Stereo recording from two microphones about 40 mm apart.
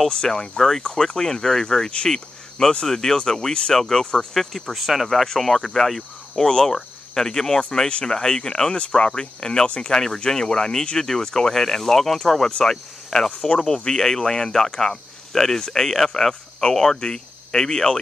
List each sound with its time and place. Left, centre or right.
0.1 s speech: centre